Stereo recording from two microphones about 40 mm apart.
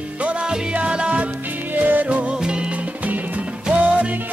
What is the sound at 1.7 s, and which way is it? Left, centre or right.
Music, right.